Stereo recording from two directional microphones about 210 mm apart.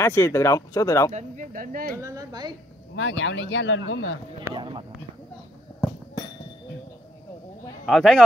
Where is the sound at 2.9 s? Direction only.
60° left (ahead or behind).